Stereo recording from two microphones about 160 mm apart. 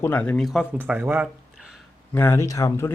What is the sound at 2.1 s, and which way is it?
Speech, 15° left (ahead or behind).